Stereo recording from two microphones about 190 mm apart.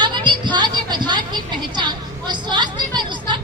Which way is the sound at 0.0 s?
25° right (ahead or behind).